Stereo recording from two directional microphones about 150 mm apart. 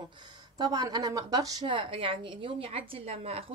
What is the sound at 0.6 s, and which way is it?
A woman's voice, 25° right (ahead or behind).